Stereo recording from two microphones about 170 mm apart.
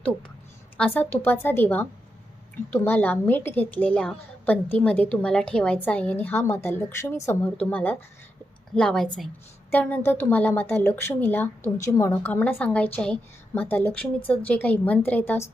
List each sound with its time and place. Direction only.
0.8 s a woman's voice: 10° left (ahead or behind)